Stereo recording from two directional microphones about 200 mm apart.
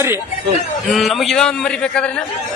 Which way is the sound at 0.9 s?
Centre (ahead or behind).